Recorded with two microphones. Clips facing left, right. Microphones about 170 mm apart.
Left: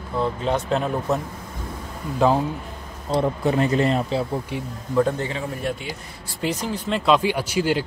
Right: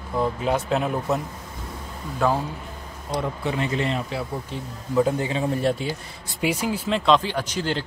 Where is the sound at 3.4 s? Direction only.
40° left (ahead or behind).